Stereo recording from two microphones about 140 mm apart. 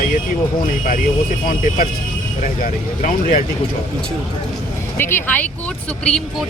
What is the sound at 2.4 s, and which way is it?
Speech, 65° left (ahead or behind).